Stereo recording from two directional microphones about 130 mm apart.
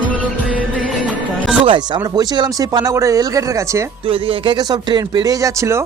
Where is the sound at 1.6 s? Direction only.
35° right (ahead or behind).